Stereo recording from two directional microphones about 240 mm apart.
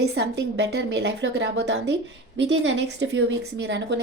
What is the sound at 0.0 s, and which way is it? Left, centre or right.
A woman's voice, right.